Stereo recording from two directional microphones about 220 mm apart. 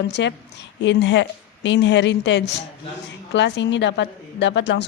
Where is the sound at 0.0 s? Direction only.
50° left (ahead or behind).